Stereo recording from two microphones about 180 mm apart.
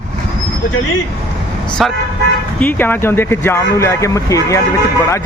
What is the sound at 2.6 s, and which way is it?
Speech, 10° left (ahead or behind).